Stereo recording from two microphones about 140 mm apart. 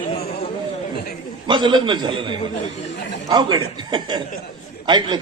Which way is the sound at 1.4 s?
35° right (ahead or behind).